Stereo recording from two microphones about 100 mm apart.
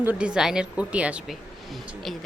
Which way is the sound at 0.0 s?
15° right (ahead or behind).